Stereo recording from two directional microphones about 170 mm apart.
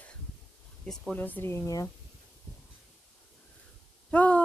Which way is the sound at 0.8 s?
5° left (ahead or behind).